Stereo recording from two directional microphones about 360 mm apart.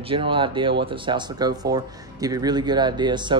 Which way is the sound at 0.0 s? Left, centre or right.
Centre.